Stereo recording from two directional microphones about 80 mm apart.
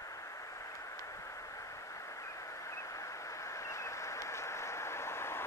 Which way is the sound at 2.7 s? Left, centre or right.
Left.